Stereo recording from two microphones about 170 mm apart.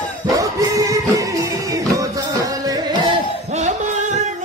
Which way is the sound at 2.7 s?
30° right (ahead or behind).